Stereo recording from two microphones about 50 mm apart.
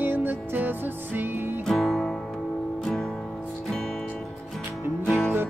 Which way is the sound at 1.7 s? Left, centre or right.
Centre.